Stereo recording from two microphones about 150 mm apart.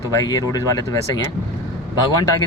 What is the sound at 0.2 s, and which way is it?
Speech, 25° left (ahead or behind).